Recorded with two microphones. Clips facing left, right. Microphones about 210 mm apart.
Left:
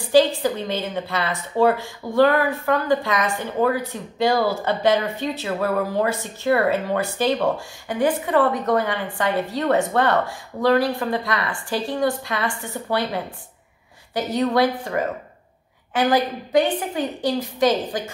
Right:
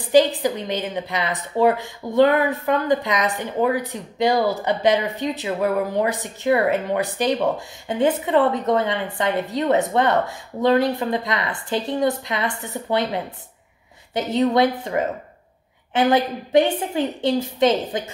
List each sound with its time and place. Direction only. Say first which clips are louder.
0.1 s a woman's voice: right 1 dB; 15° right (ahead or behind)